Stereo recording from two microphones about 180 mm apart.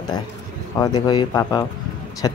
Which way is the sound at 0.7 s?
20° left (ahead or behind).